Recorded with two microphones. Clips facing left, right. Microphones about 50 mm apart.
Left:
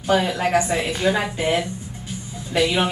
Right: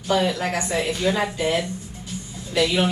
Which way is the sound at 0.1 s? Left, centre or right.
Left.